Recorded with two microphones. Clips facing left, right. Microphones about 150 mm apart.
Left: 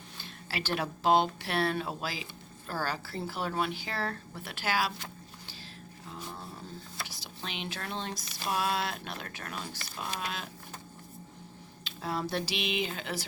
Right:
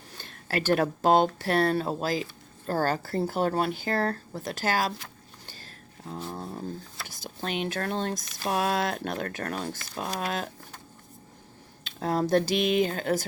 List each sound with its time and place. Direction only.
0.2 s speech: 50° right (ahead or behind)
6.1 s a sound: 40° right (ahead or behind)
7.1 s speech: 50° right (ahead or behind)
11.9 s speech: 50° right (ahead or behind)